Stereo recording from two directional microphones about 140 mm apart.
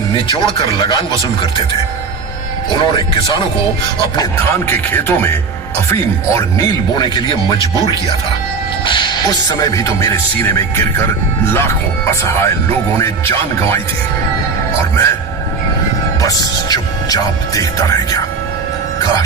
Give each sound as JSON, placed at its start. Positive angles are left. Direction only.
{"t": 0.3, "sound": "speech", "side_deg": 35}
{"t": 2.6, "sound": "speech", "side_deg": 35}
{"t": 4.2, "sound": "speech", "side_deg": 15}
{"t": 6.9, "sound": "speech", "side_deg": 35}
{"t": 9.5, "sound": "speech", "side_deg": 25}
{"t": 16.2, "sound": "speech", "side_deg": 25}